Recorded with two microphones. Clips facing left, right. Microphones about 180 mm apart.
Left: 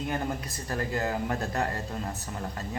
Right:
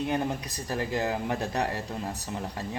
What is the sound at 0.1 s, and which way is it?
Speech, 15° right (ahead or behind).